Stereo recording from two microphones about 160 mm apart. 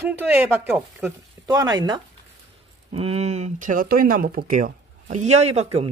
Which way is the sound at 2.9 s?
40° right (ahead or behind).